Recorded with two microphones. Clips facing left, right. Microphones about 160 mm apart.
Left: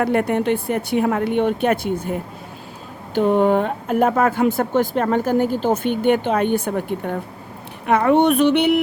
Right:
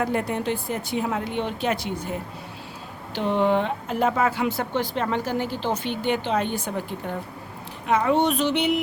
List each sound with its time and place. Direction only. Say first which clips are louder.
0.0 s speech: left 6 dB; 60° left (ahead or behind)
3.2 s speech: left 6 dB; 45° left (ahead or behind); by 8.8 s 60° left (ahead or behind)